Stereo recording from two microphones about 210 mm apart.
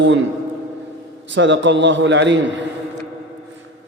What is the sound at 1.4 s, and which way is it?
A man's voice, 60° right (ahead or behind).